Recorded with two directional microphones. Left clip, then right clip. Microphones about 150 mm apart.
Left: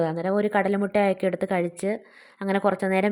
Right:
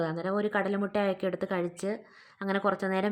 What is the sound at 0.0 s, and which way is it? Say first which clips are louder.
A woman's voice: left 6 dB; 30° left (ahead or behind).